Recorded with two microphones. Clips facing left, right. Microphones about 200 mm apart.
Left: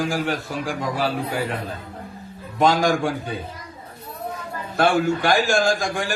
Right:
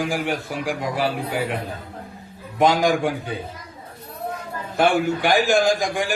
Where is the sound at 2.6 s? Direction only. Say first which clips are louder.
Right 1 dB; 15° right (ahead or behind).